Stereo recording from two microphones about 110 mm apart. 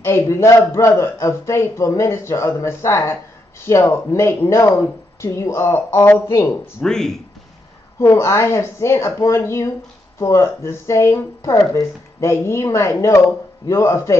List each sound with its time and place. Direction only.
0.0 s a man's voice: 25° left (ahead or behind)
6.8 s speech: 5° left (ahead or behind)
8.0 s a man's voice: 25° left (ahead or behind)